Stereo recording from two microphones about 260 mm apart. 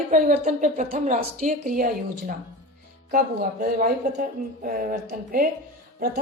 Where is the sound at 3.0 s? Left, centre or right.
Right.